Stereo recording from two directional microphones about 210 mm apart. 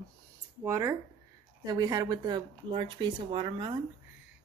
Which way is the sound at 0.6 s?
10° right (ahead or behind).